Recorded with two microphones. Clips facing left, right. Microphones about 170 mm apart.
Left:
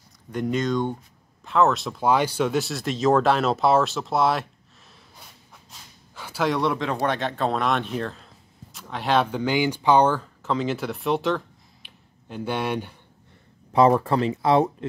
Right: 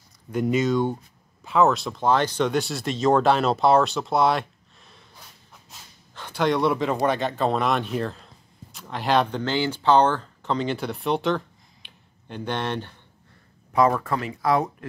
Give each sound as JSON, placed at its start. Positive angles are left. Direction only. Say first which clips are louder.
{"t": 0.3, "sound": "speech", "louder": "right 2 dB", "side_deg": -5}
{"t": 6.1, "sound": "speech", "louder": "right 1 dB", "side_deg": 5}
{"t": 13.7, "sound": "speech", "louder": "left 3 dB", "side_deg": 30}